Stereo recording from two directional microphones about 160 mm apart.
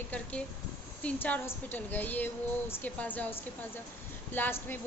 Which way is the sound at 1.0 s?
10° left (ahead or behind).